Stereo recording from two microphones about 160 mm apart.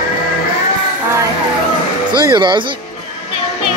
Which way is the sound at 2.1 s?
30° right (ahead or behind).